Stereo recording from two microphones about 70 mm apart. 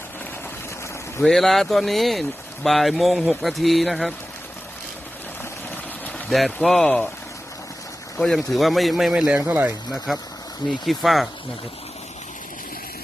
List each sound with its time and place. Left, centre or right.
1.2 s speech: centre
5.7 s a sound: left
6.3 s speech: centre
8.2 s speech: centre
9.1 s speech: centre
10.1 s speech: centre